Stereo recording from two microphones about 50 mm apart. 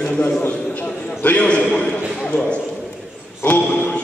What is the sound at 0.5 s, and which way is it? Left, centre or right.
A man's voice, left.